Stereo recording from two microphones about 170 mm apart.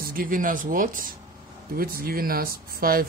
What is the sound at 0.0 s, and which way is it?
Speech, 55° right (ahead or behind).